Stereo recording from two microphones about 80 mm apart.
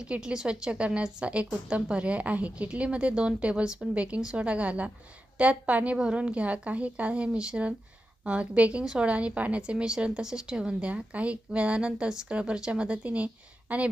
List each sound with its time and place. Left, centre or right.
0.0 s a woman's voice: centre